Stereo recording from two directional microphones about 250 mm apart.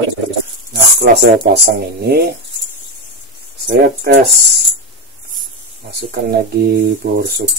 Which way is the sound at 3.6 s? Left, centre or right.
Right.